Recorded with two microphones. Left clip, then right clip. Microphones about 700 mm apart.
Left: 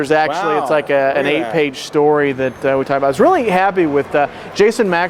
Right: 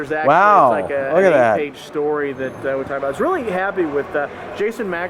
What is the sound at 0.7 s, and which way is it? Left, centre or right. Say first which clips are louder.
Speech: left 5 dB; left.